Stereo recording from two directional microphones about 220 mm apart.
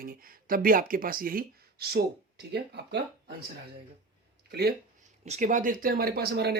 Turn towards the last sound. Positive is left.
turn(degrees=-50)  # may be behind; listen again after turning